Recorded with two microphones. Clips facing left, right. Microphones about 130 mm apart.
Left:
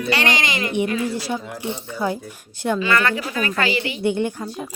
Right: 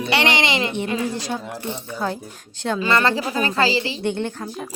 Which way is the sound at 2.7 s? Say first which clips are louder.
Right 2 dB; 30° right (ahead or behind).